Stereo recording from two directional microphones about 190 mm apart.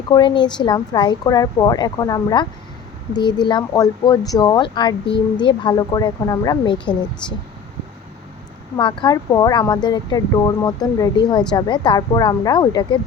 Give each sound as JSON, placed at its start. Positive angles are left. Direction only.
{"t": 0.1, "sound": "speech", "side_deg": 25}
{"t": 8.7, "sound": "speech", "side_deg": 25}